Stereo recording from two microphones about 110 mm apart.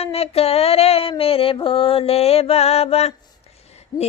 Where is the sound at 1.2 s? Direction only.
60° left (ahead or behind).